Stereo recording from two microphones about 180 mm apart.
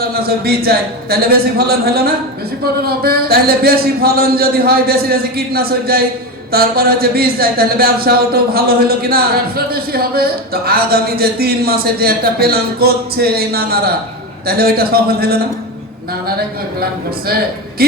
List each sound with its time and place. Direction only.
0.1 s speech: 60° right (ahead or behind)
17.8 s speech: 60° right (ahead or behind)